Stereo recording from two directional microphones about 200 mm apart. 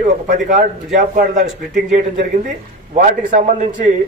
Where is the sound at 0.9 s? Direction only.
40° right (ahead or behind).